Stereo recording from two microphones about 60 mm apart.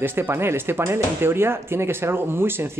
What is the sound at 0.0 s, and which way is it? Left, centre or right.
Speech, right.